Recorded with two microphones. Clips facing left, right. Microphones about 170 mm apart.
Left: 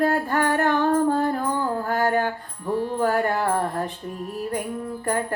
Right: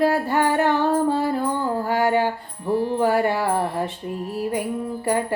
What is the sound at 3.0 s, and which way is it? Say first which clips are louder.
Mantra: even; 5° right (ahead or behind).